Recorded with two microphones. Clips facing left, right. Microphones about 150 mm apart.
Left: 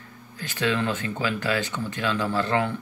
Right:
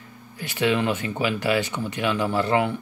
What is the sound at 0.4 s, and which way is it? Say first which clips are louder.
Speech: right 3 dB; 15° right (ahead or behind).